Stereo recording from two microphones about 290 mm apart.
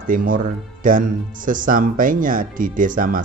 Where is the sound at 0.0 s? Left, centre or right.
Right.